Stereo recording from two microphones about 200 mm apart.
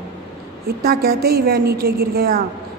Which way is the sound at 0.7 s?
50° right (ahead or behind).